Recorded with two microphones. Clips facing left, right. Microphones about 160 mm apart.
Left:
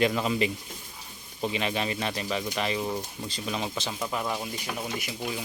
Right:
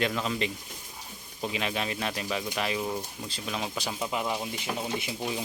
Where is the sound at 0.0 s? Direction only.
5° left (ahead or behind).